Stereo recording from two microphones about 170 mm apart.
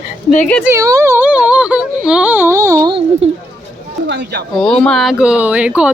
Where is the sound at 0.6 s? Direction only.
20° right (ahead or behind).